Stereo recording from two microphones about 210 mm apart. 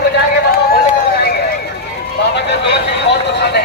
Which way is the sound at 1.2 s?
45° left (ahead or behind).